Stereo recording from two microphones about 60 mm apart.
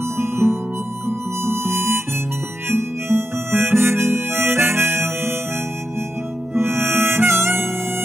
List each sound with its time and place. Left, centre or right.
0.2 s guitar: right
1.0 s music: right
2.7 s harmonica: right
6.5 s harmonica: right